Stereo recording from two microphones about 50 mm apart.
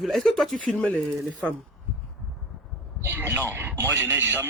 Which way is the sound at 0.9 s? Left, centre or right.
Left.